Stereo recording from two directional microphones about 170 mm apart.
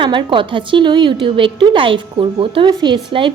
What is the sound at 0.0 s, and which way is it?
A woman's voice, 30° right (ahead or behind).